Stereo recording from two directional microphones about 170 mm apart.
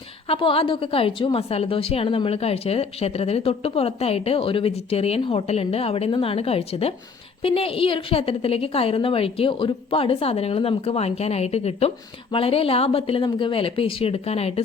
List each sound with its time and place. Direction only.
0.3 s a woman's voice: 30° left (ahead or behind)